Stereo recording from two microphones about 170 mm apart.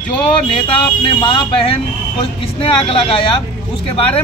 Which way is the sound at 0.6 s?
30° left (ahead or behind).